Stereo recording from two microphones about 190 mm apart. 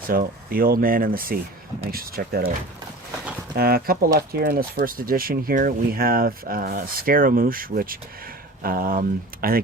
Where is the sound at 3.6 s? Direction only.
50° right (ahead or behind).